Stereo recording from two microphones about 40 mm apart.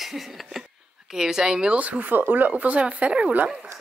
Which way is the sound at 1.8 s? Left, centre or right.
Right.